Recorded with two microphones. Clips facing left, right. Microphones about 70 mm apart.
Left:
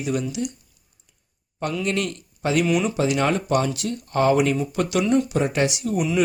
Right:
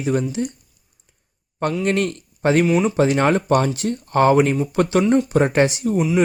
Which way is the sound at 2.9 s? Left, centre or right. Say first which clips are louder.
Right 5 dB; right.